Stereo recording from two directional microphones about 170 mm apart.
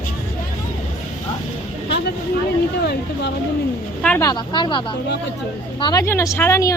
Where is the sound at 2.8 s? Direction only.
75° left (ahead or behind).